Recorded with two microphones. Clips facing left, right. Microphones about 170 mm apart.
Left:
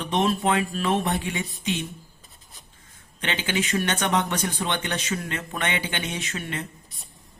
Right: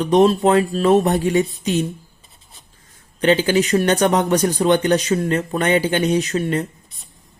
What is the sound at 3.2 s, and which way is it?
Speech, 40° right (ahead or behind).